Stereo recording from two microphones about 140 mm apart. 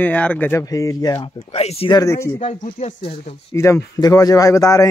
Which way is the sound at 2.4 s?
60° left (ahead or behind).